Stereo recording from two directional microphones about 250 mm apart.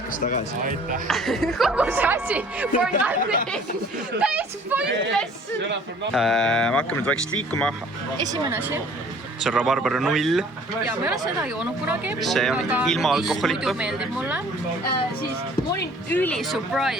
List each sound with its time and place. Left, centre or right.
0.1 s speech: left
1.0 s speech: centre
6.1 s speech: centre
8.3 s speech: centre
9.4 s speech: centre
16.0 s speech: centre